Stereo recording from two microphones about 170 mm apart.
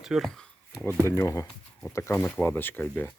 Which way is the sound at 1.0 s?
15° left (ahead or behind).